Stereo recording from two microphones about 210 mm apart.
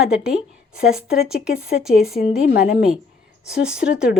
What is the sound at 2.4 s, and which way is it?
Speech, 55° left (ahead or behind).